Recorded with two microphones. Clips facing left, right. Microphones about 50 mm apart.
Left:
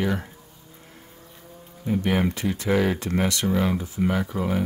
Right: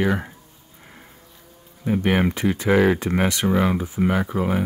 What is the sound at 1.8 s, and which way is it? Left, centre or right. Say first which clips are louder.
Speech: right 3 dB; right.